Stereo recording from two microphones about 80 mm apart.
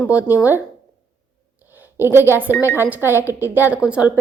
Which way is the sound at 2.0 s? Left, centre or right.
Right.